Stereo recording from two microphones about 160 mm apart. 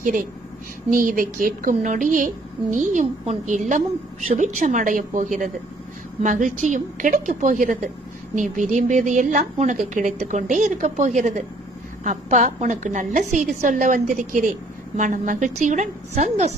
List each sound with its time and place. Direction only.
0.9 s a woman's voice: 60° right (ahead or behind); by 16.5 s 45° right (ahead or behind)